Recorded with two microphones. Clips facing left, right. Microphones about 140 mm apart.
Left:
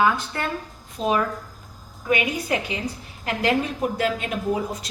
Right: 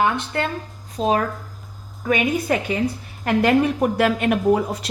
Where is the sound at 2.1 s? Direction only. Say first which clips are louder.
Right 3 dB; 50° right (ahead or behind).